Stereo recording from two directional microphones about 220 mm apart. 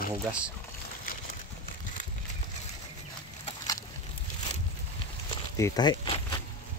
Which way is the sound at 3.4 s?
15° left (ahead or behind).